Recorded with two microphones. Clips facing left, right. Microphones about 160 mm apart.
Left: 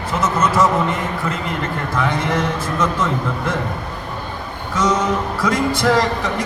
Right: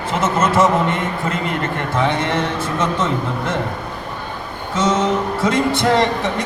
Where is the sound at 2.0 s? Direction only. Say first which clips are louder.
Right 1 dB; 25° right (ahead or behind).